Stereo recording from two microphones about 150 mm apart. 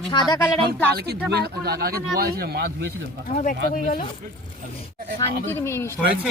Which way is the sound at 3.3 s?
60° left (ahead or behind).